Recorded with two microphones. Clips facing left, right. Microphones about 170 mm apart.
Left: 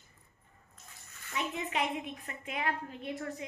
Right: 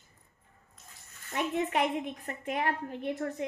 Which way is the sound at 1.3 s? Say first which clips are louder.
Right 6 dB; 55° right (ahead or behind).